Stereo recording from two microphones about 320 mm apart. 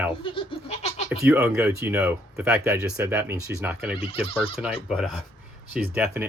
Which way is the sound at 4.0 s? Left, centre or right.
Centre.